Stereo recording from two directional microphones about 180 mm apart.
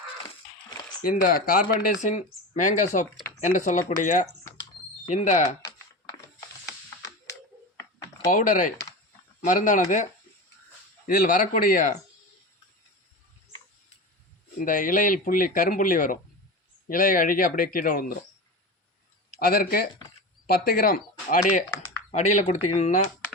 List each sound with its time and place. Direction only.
1.0 s speech: 50° left (ahead or behind)
5.6 s typing: 20° left (ahead or behind)
8.3 s speech: 45° left (ahead or behind)
11.0 s speech: 50° left (ahead or behind)
14.6 s speech: 50° left (ahead or behind)
19.4 s speech: 55° left (ahead or behind)
21.8 s speech: 40° left (ahead or behind)